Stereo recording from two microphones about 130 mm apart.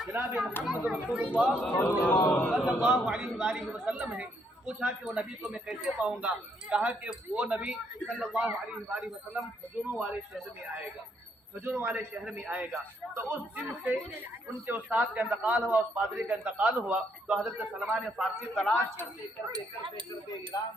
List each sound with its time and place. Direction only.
0.0 s speech: 15° right (ahead or behind)
1.7 s speech: 15° left (ahead or behind)
2.6 s speech: 5° right (ahead or behind)
11.6 s speech: 15° right (ahead or behind)
19.5 s speech: 40° right (ahead or behind)
20.5 s cutlery: 30° left (ahead or behind)